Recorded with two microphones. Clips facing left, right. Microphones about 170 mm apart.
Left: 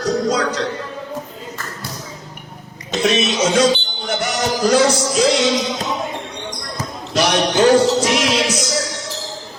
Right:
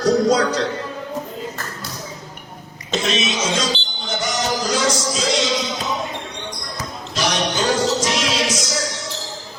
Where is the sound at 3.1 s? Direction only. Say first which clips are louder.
Left 8 dB; 65° left (ahead or behind).